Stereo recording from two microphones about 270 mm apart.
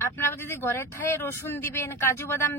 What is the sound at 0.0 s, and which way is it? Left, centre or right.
Speech, centre.